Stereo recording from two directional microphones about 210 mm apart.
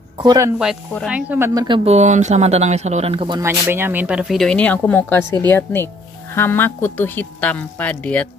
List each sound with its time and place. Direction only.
0.2 s speech: 20° right (ahead or behind)
1.0 s speech: 5° right (ahead or behind)
1.9 s a woman's voice: 35° right (ahead or behind); by 8.3 s 5° left (ahead or behind)